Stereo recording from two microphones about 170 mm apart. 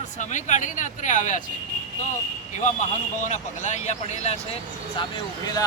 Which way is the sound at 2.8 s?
45° left (ahead or behind).